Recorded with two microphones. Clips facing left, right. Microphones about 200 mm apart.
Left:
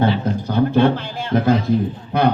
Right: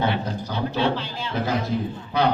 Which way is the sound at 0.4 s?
50° left (ahead or behind).